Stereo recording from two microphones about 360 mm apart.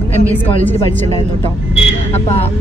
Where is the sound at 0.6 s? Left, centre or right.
Centre.